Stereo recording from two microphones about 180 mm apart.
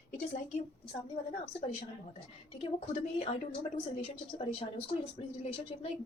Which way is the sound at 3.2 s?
30° left (ahead or behind).